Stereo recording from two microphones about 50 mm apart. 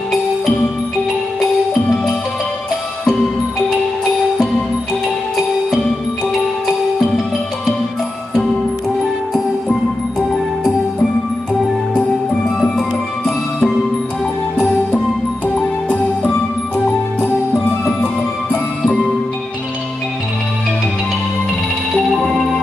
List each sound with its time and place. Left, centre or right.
1.4 s music: centre
10.3 s music: centre
11.9 s music: left
13.2 s music: centre
16.3 s music: centre
21.9 s music: centre